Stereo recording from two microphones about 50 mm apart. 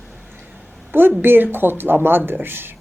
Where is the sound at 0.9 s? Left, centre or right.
Right.